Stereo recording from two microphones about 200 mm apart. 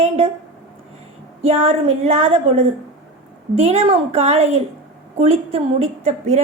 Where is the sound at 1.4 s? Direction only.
30° right (ahead or behind).